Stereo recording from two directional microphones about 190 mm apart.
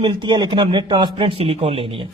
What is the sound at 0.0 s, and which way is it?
A man's voice, 25° right (ahead or behind).